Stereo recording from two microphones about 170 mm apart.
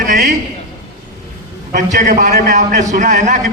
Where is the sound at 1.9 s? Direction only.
45° right (ahead or behind).